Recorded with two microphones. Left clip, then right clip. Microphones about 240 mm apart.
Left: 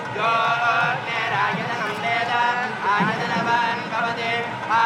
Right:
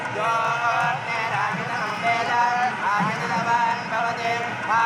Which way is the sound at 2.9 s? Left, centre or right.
Right.